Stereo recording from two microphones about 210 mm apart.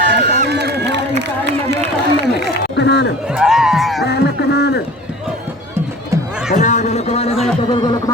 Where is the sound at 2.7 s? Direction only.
55° left (ahead or behind).